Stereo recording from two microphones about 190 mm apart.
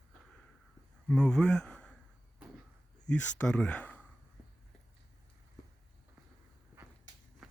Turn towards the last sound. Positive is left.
turn(degrees=75)  # may be behind; listen again after turning